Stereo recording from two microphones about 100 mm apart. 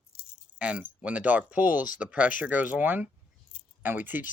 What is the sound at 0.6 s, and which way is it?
Speech, 15° right (ahead or behind).